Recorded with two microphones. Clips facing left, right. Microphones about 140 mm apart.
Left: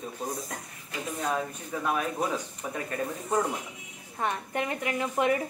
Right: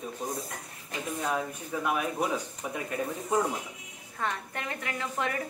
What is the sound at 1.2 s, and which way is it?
Speech, 5° right (ahead or behind).